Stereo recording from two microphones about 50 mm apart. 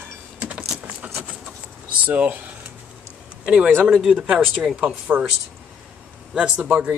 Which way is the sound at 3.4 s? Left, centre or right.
Right.